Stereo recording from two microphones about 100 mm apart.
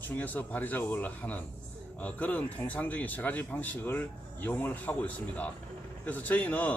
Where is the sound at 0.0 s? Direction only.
15° left (ahead or behind).